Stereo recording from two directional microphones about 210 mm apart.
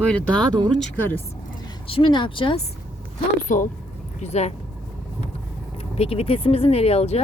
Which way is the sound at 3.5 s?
35° left (ahead or behind).